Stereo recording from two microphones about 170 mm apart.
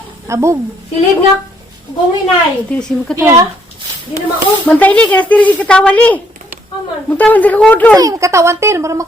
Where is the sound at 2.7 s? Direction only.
5° left (ahead or behind).